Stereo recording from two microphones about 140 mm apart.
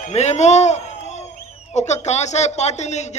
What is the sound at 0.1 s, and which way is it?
A man's voice, 55° left (ahead or behind).